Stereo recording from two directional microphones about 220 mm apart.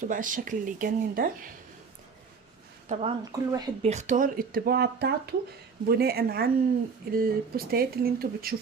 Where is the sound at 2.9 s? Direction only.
30° right (ahead or behind).